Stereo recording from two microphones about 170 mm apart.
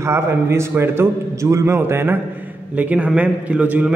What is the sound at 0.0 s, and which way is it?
A man's voice, 15° right (ahead or behind).